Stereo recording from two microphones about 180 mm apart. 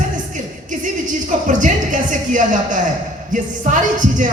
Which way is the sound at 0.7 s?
45° right (ahead or behind).